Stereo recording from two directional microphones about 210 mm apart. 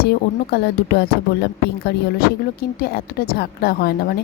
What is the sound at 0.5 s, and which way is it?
Speech, 50° left (ahead or behind).